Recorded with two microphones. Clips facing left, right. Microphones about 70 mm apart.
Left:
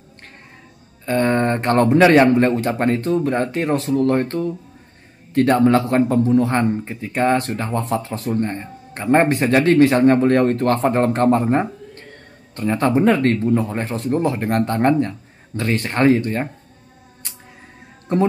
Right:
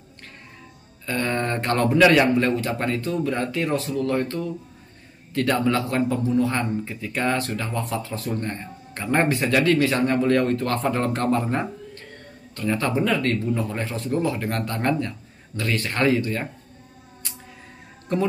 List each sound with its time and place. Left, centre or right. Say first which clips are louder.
1.0 s a man's voice: left 7 dB; left
18.1 s a man's voice: left 5 dB; left